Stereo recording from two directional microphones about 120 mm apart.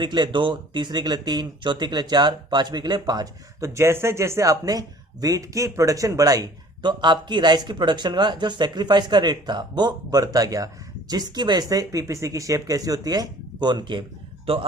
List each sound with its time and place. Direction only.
0.0 s speech: 40° right (ahead or behind)
3.7 s speech: 20° right (ahead or behind); by 14.0 s 40° right (ahead or behind)
14.5 s speech: 50° right (ahead or behind)